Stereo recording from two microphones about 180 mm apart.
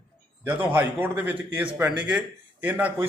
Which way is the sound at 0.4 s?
10° right (ahead or behind).